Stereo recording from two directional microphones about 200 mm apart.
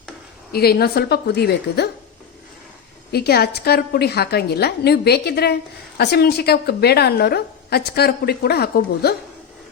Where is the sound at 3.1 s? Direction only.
50° left (ahead or behind).